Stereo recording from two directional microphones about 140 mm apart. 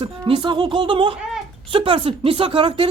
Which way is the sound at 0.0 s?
40° right (ahead or behind).